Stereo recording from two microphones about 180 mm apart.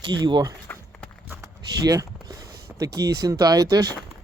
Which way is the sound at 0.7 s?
10° left (ahead or behind).